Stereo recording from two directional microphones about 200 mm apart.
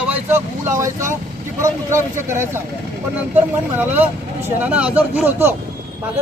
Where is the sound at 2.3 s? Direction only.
10° right (ahead or behind).